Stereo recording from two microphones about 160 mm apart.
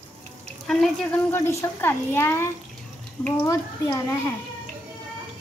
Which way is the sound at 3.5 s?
20° left (ahead or behind).